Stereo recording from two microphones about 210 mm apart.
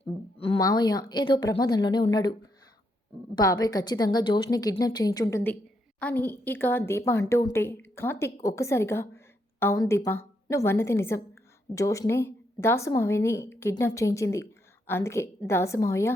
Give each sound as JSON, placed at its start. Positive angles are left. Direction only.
{"t": 0.3, "sound": "a woman's voice", "side_deg": 25}
{"t": 3.3, "sound": "a woman's voice", "side_deg": 20}